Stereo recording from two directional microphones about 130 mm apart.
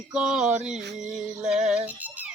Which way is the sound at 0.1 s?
5° right (ahead or behind).